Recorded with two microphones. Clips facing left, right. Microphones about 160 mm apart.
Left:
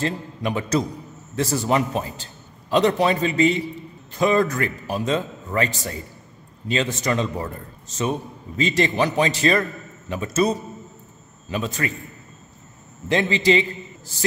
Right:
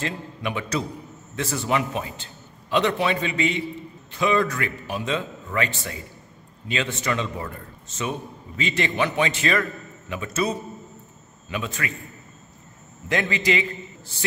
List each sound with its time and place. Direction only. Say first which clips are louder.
0.0 s a man's voice: left 4 dB; 35° left (ahead or behind)
13.1 s a man's voice: left 5 dB; 30° left (ahead or behind)